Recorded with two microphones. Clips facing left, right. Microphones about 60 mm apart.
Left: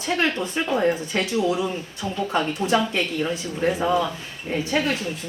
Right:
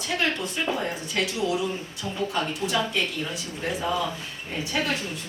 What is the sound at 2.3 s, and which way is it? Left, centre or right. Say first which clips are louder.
Speech: left 7 dB; left.